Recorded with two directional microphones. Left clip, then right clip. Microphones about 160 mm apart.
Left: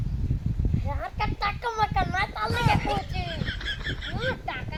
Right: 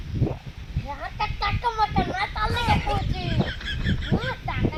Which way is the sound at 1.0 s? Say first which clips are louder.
Right 2 dB; 35° left (ahead or behind).